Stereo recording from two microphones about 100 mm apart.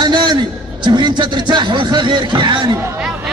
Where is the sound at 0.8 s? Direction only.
50° right (ahead or behind).